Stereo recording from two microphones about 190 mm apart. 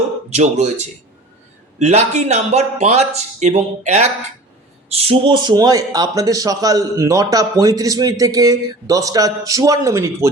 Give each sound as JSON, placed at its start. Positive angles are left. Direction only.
{"t": 0.3, "sound": "speech", "side_deg": -35}